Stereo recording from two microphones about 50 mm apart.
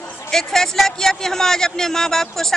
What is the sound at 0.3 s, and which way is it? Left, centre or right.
A man's voice, centre.